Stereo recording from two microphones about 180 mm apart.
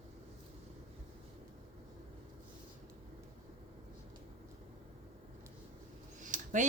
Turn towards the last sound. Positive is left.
turn(degrees=-45)  # may be behind; listen again after turning